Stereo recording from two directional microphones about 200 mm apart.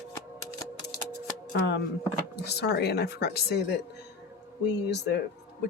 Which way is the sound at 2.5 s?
55° left (ahead or behind).